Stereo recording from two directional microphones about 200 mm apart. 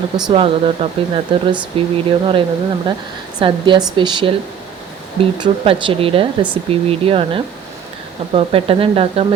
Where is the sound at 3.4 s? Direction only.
25° right (ahead or behind).